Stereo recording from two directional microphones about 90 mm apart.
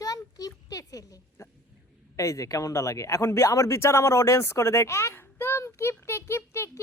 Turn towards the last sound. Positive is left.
turn(degrees=30)  # may be behind; listen again after turning